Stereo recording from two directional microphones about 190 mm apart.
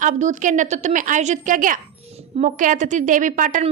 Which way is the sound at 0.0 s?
40° right (ahead or behind).